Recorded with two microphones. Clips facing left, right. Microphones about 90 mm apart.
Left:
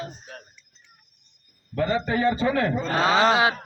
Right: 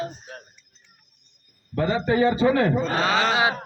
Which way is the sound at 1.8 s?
5° right (ahead or behind).